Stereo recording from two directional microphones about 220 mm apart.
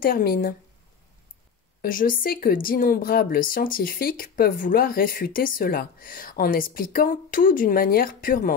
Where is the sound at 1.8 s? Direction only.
40° left (ahead or behind).